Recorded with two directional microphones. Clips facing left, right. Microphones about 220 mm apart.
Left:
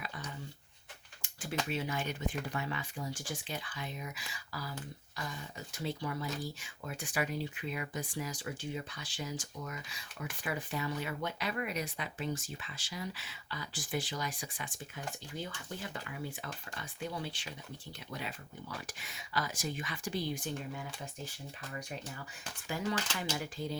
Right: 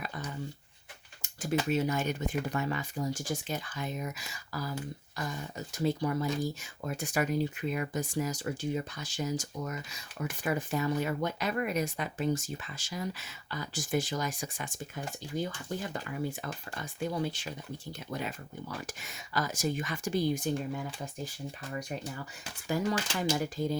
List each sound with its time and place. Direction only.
0.0 s a sound: 45° right (ahead or behind)
1.7 s speech: 45° right (ahead or behind)
22.6 s speech: 40° right (ahead or behind)